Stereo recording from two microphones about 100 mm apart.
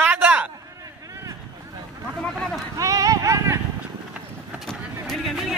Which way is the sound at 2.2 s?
10° left (ahead or behind).